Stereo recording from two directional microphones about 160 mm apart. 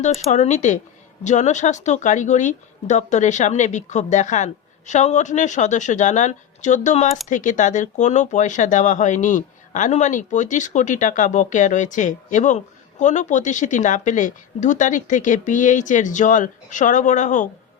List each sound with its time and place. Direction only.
0.3 s speech: 45° left (ahead or behind)